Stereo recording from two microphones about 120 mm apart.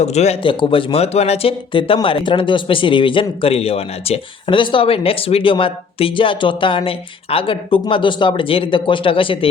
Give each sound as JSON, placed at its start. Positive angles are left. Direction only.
{"t": 0.0, "sound": "speech", "side_deg": 65}
{"t": 0.4, "sound": "speech", "side_deg": 45}